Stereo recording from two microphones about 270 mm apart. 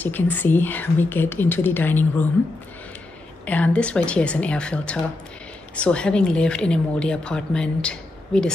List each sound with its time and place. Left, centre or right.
0.0 s speech: centre
3.4 s a woman's voice: centre